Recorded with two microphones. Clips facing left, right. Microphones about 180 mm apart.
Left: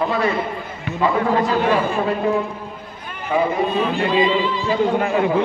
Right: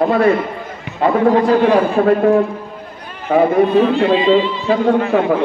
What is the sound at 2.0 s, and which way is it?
A man's voice, 55° right (ahead or behind).